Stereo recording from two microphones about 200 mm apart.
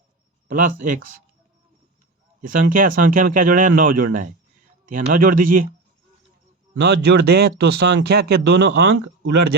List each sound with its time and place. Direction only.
0.4 s speech: 40° right (ahead or behind)
2.4 s speech: 45° right (ahead or behind)
6.7 s speech: 55° right (ahead or behind)